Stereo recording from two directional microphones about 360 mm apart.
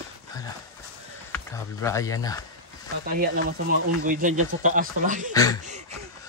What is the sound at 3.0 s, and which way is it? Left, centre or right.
Speech, right.